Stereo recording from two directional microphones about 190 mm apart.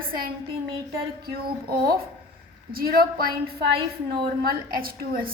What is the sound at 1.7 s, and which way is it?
A woman's voice, 50° right (ahead or behind).